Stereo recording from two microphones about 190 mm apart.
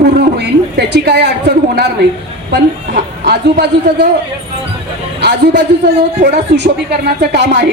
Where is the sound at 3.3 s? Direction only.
60° right (ahead or behind).